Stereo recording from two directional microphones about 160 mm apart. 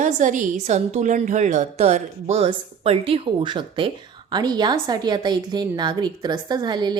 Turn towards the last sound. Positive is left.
turn(degrees=-25)  # may be behind; listen again after turning